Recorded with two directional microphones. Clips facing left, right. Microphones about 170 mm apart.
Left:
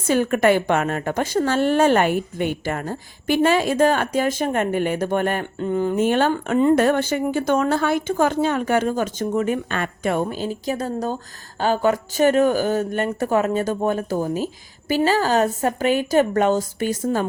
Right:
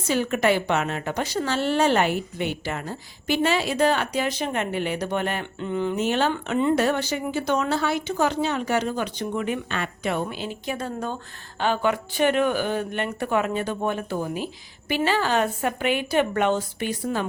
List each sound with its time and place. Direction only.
0.1 s a woman's voice: 50° left (ahead or behind)